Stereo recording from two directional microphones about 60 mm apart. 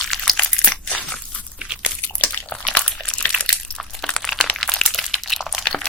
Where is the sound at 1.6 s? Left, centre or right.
Centre.